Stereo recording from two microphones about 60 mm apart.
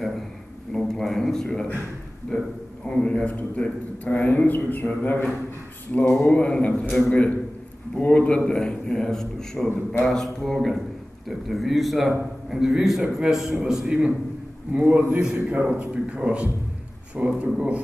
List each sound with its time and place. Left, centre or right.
0.7 s a man's voice: centre
3.3 s a man's voice: left; by 17.8 s right